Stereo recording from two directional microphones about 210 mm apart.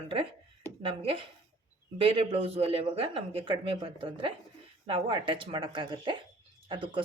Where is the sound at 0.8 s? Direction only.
25° right (ahead or behind).